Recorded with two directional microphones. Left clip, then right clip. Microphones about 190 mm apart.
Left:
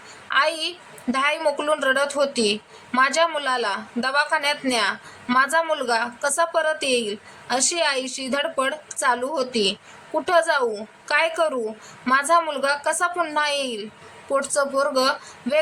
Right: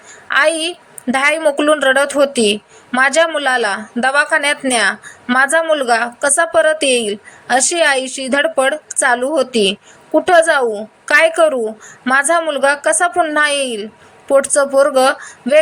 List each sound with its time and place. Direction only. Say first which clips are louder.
0.3 s a woman's voice: right 7 dB; 25° right (ahead or behind)